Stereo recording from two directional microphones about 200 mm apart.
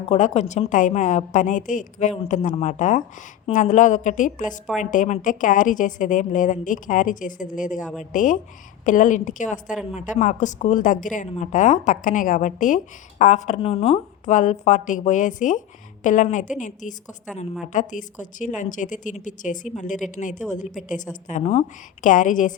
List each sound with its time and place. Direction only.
0.1 s a woman's voice: 35° left (ahead or behind)